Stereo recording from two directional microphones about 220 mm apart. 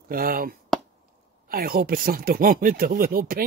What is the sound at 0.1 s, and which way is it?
Speech, 40° right (ahead or behind).